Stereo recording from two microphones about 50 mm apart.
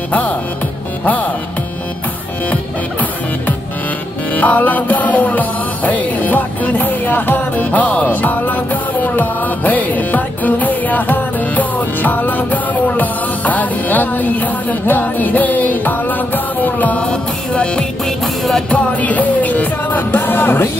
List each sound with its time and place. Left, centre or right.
4.4 s music: left
17.0 s music: left
20.0 s music: left